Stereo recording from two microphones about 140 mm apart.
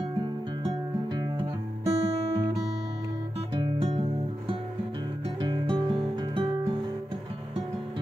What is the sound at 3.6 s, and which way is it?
Music, 35° right (ahead or behind).